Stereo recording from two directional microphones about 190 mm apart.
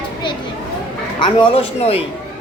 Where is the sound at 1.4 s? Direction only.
30° left (ahead or behind).